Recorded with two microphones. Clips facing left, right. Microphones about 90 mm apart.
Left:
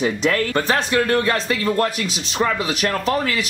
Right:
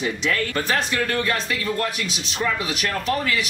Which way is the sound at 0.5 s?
35° left (ahead or behind).